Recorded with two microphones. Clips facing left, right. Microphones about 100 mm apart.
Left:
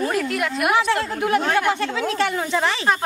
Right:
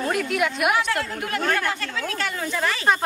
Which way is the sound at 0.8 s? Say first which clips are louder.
Left 5 dB; 25° left (ahead or behind).